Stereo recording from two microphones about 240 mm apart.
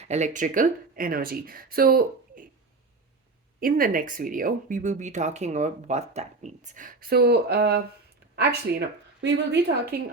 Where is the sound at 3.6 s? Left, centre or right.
Right.